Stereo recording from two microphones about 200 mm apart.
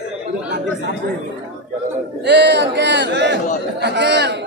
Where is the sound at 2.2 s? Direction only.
60° right (ahead or behind).